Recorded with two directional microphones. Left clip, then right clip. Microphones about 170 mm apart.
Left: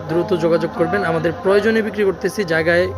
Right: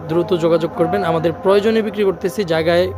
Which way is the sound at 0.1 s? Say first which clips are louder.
Right 1 dB; 20° right (ahead or behind).